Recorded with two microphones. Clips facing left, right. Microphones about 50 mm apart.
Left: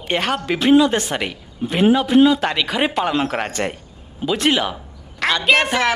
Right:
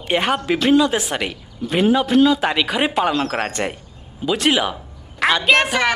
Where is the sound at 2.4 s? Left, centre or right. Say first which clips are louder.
Right 1 dB; centre.